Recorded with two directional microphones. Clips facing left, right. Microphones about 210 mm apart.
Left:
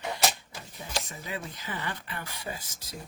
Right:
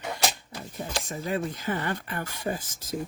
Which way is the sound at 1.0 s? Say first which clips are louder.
Right 8 dB; 50° right (ahead or behind).